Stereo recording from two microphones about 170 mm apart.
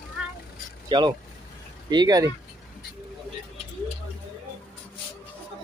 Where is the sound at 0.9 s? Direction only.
25° right (ahead or behind).